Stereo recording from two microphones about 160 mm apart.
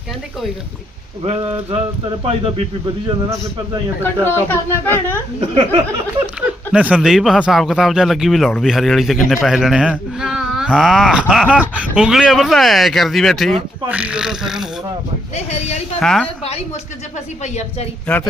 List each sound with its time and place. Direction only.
1.2 s speech: 40° right (ahead or behind)
4.0 s speech: 15° left (ahead or behind)
5.5 s speech: 30° right (ahead or behind)
6.4 s speech: 10° right (ahead or behind)
16.0 s speech: 5° left (ahead or behind)
17.4 s a woman's voice: 45° left (ahead or behind)